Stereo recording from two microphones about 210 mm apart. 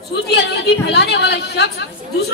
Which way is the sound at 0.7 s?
55° left (ahead or behind).